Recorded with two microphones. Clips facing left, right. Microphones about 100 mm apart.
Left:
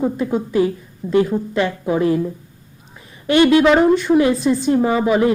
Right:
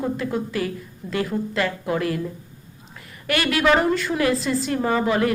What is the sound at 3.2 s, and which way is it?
A woman's voice, 25° left (ahead or behind).